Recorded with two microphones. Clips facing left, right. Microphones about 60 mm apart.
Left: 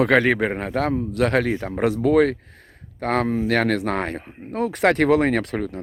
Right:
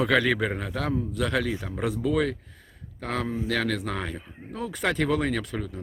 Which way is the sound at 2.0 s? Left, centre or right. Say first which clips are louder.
Left 9 dB; left.